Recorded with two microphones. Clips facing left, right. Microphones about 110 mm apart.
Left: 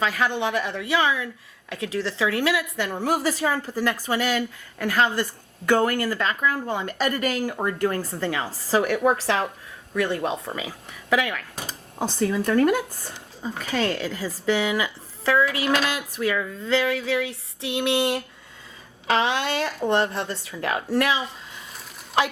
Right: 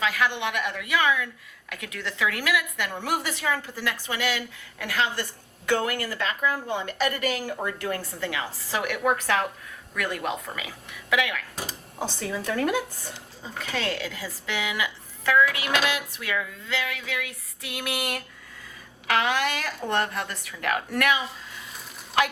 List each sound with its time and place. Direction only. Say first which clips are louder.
0.0 s a woman's voice: left 2 dB; 35° left (ahead or behind)